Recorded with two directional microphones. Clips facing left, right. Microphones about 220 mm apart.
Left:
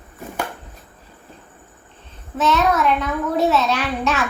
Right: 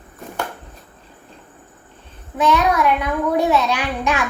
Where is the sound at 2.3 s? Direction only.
10° right (ahead or behind).